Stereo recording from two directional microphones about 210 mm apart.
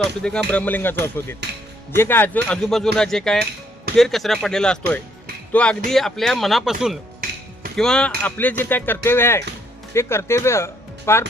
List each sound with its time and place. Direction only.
0.2 s speech: 5° left (ahead or behind)
7.2 s music: 45° right (ahead or behind)
7.8 s speech: 5° left (ahead or behind)